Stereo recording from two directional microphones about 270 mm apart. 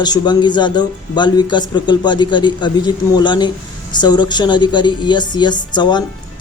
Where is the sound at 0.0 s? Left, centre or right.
Centre.